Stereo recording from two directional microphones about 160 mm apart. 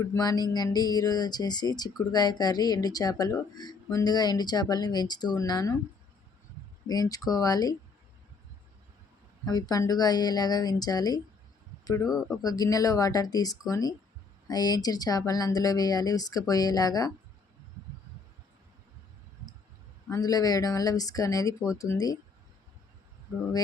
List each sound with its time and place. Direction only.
0.0 s speech: 20° left (ahead or behind)
6.8 s speech: 25° left (ahead or behind)
9.5 s speech: 25° left (ahead or behind)
12.0 s speech: centre (ahead or behind)
12.4 s speech: 25° left (ahead or behind)
20.1 s speech: 20° left (ahead or behind)